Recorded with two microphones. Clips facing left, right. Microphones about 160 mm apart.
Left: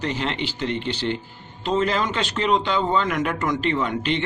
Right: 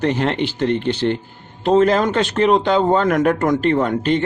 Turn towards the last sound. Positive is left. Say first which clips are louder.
# right 6 dB
turn(degrees=-45)  # may be behind; listen again after turning